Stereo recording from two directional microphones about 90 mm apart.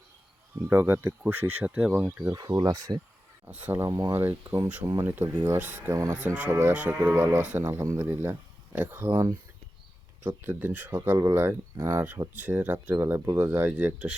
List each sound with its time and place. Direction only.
0.7 s speech: 25° right (ahead or behind)
2.3 s speech: 45° right (ahead or behind)
3.4 s speech: 25° right (ahead or behind)
3.8 s speech: 45° right (ahead or behind)
4.1 s speech: 25° right (ahead or behind)
6.1 s livestock: 15° right (ahead or behind)
7.1 s speech: 25° right (ahead or behind)
10.2 s speech: 20° right (ahead or behind)